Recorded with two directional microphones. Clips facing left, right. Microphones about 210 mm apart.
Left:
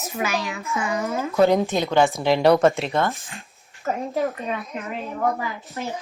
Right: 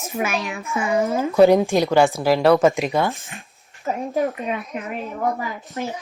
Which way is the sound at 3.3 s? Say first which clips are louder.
Right 1 dB; 15° right (ahead or behind).